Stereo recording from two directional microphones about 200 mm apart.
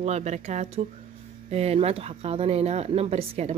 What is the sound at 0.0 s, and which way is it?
Speech, 35° right (ahead or behind).